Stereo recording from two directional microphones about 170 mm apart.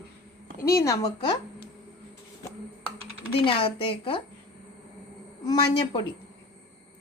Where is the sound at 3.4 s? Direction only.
30° left (ahead or behind).